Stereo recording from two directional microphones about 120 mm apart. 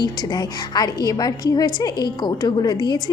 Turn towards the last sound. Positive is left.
turn(degrees=35)  # may be behind; listen again after turning